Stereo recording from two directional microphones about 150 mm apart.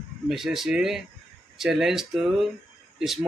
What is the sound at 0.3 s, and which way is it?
Speech, centre (ahead or behind).